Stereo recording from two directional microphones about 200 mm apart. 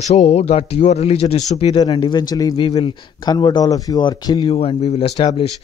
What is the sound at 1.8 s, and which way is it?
Speech, 25° left (ahead or behind).